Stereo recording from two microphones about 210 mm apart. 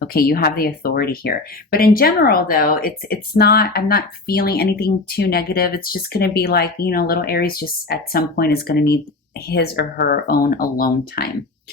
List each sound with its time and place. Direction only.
0.0 s speech: 45° left (ahead or behind)